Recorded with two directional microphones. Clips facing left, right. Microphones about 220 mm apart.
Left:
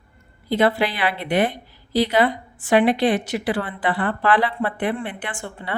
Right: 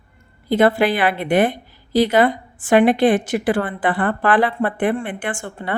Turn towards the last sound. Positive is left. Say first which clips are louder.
# right 5 dB
turn(degrees=-45)  # may be behind; listen again after turning